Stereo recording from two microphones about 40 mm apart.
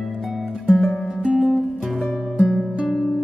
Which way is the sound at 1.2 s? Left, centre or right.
Centre.